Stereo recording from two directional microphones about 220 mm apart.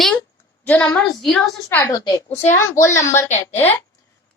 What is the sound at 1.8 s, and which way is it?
A woman's voice, 15° left (ahead or behind).